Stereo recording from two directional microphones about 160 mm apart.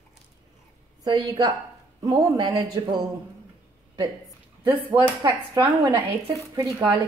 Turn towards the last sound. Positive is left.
turn(degrees=-10)  # may be behind; listen again after turning